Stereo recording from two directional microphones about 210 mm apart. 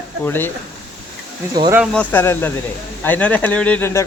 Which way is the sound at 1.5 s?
20° right (ahead or behind).